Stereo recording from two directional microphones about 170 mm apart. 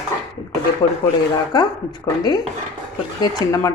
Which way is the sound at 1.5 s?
25° left (ahead or behind).